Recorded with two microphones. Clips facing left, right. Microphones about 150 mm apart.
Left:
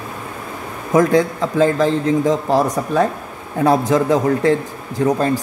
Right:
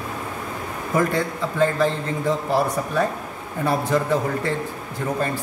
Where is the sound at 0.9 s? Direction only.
90° left.